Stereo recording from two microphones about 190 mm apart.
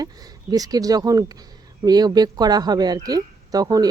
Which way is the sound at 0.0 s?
20° right (ahead or behind).